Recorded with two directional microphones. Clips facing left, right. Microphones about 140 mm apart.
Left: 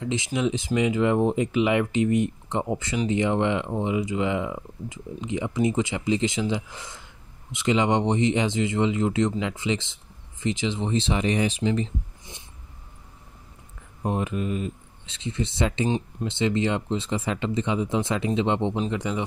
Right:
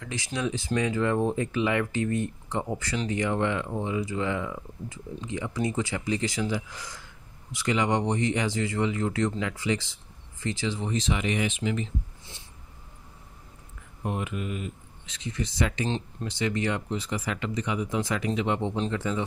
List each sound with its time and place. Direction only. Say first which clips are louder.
0.0 s speech: left 6 dB; 20° left (ahead or behind)
14.0 s a man's voice: left 5 dB; 35° left (ahead or behind); by 19.2 s 15° left (ahead or behind)